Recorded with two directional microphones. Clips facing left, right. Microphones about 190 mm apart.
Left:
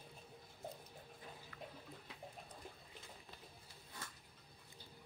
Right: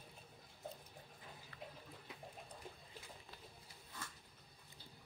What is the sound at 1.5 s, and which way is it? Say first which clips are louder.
Water: right 1 dB; 35° right (ahead or behind).